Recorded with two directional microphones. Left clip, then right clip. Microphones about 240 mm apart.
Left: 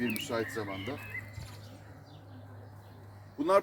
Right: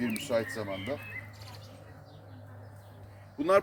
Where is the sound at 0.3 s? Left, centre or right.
Right.